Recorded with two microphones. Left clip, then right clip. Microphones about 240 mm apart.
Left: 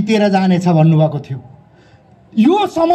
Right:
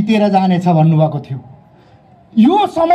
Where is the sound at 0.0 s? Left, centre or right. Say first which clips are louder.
Right 1 dB; left.